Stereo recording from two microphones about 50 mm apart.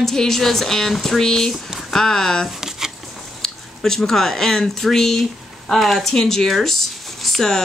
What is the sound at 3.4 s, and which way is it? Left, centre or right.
A woman's voice, centre.